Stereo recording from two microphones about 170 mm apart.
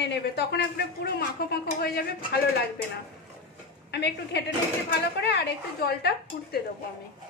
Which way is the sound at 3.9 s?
80° left.